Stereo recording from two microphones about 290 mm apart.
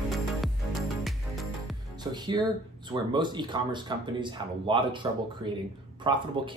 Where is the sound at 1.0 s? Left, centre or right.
Centre.